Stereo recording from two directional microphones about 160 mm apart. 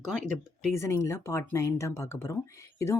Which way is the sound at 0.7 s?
20° left (ahead or behind).